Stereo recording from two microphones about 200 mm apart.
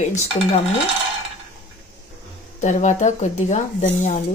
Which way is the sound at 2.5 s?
35° left (ahead or behind).